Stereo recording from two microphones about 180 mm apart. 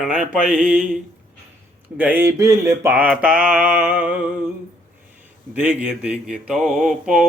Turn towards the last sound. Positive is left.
turn(degrees=-5)  # may be behind; listen again after turning